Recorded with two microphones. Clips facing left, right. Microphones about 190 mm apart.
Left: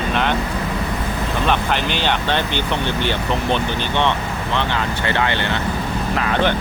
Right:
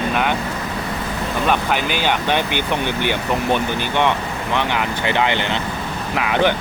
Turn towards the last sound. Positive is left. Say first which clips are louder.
# right 1 dB
turn(degrees=-10)  # may be behind; listen again after turning